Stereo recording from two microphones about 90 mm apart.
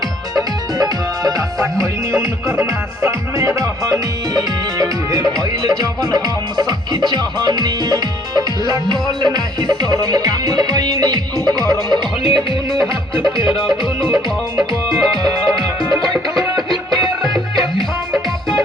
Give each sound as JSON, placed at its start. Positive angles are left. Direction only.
{"t": 0.8, "sound": "music", "side_deg": -45}
{"t": 2.6, "sound": "music", "side_deg": -35}
{"t": 12.2, "sound": "music", "side_deg": 90}
{"t": 13.6, "sound": "music", "side_deg": 0}
{"t": 14.7, "sound": "music", "side_deg": 65}
{"t": 16.4, "sound": "music", "side_deg": -45}
{"t": 17.2, "sound": "music", "side_deg": 0}